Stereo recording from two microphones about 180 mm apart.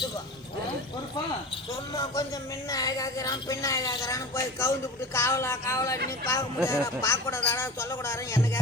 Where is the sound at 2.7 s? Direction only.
20° left (ahead or behind).